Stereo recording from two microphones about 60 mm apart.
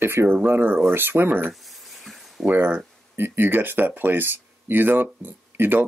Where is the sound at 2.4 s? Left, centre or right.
Right.